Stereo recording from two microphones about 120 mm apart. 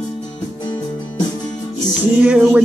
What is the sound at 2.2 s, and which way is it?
Music, 15° right (ahead or behind).